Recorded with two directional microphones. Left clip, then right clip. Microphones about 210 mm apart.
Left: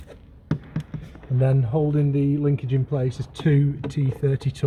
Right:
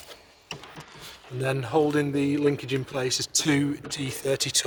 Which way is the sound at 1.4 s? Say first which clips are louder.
Right 2 dB; 60° right (ahead or behind).